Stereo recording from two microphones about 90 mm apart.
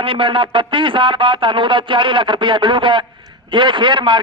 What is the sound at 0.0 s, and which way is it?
A man's voice, 75° right (ahead or behind).